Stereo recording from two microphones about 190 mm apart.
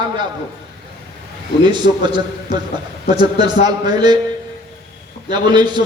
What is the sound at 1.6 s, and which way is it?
A man's voice, 25° right (ahead or behind).